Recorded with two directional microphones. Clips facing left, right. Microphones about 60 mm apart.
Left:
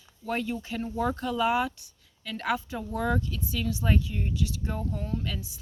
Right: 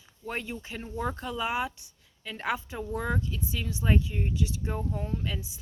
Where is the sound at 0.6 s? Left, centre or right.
Centre.